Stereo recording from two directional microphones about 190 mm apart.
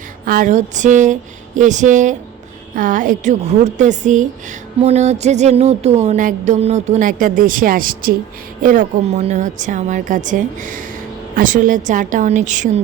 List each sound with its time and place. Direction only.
0.3 s music: 45° right (ahead or behind)
8.6 s a woman's voice: 45° right (ahead or behind)
11.3 s music: 45° right (ahead or behind)